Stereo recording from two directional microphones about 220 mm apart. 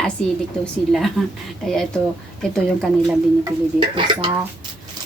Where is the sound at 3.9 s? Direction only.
20° right (ahead or behind).